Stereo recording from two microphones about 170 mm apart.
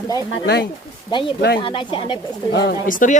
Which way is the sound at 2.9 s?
55° left (ahead or behind).